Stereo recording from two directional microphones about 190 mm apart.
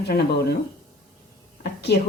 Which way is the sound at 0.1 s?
55° left (ahead or behind).